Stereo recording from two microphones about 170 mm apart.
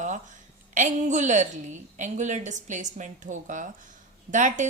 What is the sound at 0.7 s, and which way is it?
A woman's voice, 45° right (ahead or behind).